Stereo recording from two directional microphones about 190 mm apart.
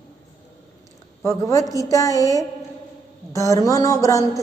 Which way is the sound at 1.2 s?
15° left (ahead or behind).